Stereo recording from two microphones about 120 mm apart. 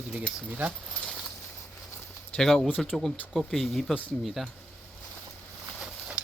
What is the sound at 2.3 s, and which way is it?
Speech, 5° left (ahead or behind).